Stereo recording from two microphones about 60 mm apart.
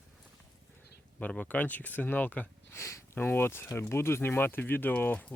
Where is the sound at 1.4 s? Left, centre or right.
Left.